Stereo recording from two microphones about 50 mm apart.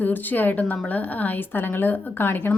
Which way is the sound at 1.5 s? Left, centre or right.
Left.